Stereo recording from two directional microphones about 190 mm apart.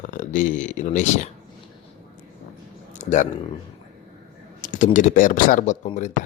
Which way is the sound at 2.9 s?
40° left (ahead or behind).